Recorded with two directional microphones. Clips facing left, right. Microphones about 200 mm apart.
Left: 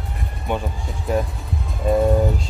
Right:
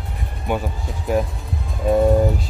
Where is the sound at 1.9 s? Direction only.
Centre (ahead or behind).